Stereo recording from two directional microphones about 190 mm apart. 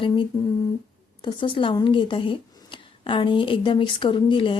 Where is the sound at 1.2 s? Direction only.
25° left (ahead or behind).